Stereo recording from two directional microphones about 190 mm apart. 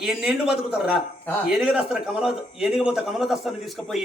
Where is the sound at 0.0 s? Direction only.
5° right (ahead or behind).